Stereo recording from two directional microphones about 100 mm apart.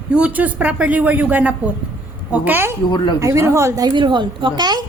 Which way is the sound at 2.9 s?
50° left (ahead or behind).